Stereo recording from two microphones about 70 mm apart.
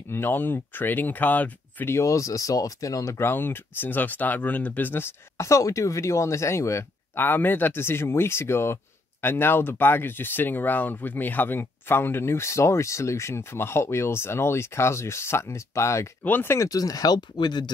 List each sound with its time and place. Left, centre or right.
0.1 s speech: left
1.9 s speech: left
3.2 s speech: left
5.4 s speech: left
16.3 s speech: left
16.5 s speech: left